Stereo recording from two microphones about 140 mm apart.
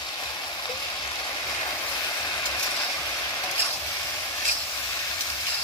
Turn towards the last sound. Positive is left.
turn(degrees=15)  # may be behind; listen again after turning